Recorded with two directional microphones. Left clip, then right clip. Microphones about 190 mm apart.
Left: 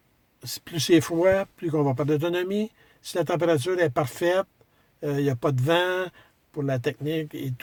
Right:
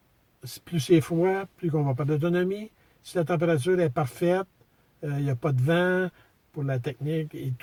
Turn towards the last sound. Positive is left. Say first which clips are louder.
# left 2 dB
turn(degrees=45)  # may be behind; listen again after turning